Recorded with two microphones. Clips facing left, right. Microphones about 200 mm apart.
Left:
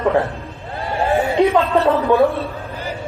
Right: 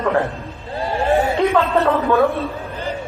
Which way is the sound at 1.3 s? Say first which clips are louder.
Left 2 dB; 15° left (ahead or behind).